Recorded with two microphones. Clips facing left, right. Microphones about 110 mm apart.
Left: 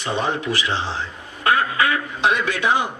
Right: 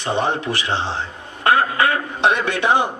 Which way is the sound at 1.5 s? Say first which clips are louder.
Right 2 dB; 45° right (ahead or behind).